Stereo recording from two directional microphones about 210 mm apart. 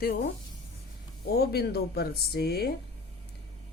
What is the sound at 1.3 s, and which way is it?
Speech, 50° left (ahead or behind).